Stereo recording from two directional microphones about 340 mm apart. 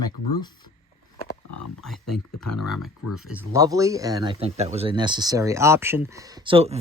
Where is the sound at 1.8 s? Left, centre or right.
Centre.